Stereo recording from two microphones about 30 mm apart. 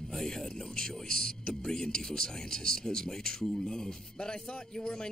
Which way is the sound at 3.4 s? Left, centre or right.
Centre.